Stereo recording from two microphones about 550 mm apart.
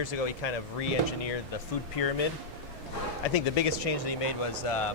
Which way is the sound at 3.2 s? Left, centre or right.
Left.